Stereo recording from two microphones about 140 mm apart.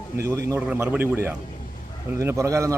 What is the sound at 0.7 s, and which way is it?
A man's voice, 10° right (ahead or behind).